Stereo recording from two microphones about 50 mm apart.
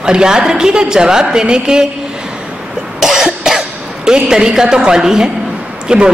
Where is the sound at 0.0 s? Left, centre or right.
Centre.